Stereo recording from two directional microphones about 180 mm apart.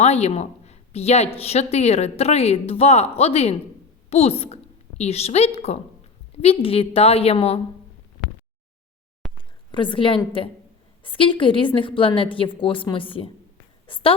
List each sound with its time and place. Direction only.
0.0 s a woman's voice: 35° left (ahead or behind)
9.2 s a sound: 5° left (ahead or behind)
9.7 s a woman's voice: 25° left (ahead or behind)